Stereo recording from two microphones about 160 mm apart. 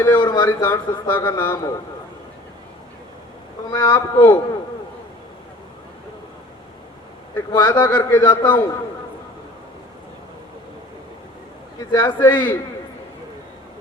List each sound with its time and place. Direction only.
0.0 s a man's voice: 20° left (ahead or behind)
0.4 s a man's voice: 15° left (ahead or behind)
3.7 s a man's voice: 25° left (ahead or behind)
7.3 s a man's voice: 15° left (ahead or behind)
11.9 s a man's voice: 15° left (ahead or behind)